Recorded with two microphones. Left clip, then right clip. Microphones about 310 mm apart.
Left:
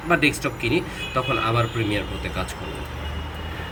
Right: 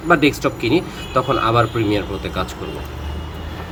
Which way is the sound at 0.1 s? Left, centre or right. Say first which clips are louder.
Right 5 dB; centre.